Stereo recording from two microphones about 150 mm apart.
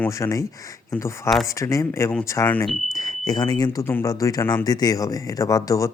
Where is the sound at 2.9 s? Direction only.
25° left (ahead or behind).